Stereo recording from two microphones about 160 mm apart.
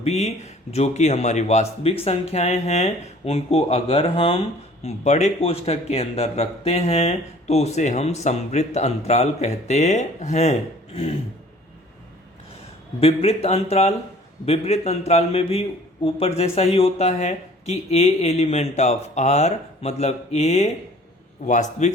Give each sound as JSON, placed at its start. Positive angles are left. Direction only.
{"t": 0.0, "sound": "speech", "side_deg": 40}
{"t": 13.0, "sound": "speech", "side_deg": 40}